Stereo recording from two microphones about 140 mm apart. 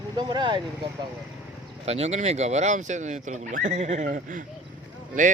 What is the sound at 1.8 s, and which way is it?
A man's voice, 50° right (ahead or behind).